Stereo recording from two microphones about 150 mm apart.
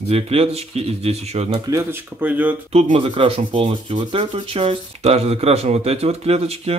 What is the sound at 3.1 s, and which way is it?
Speech, 35° right (ahead or behind).